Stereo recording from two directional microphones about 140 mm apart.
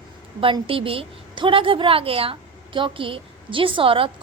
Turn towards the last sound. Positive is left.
turn(degrees=-40)  # may be behind; listen again after turning